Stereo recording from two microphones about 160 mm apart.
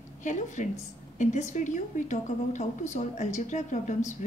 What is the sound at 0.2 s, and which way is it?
A woman's voice, 50° left (ahead or behind).